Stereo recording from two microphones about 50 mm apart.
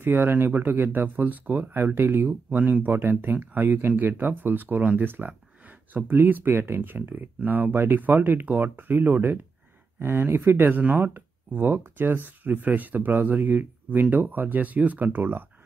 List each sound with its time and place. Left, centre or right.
0.0 s speech: right
2.5 s speech: right